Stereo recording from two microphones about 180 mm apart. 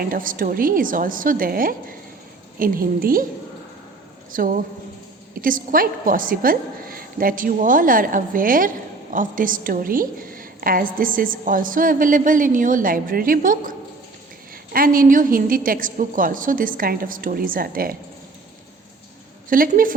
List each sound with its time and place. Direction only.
0.1 s a woman's voice: 50° right (ahead or behind)
4.3 s a woman's voice: 50° right (ahead or behind)
19.5 s a woman's voice: 50° right (ahead or behind)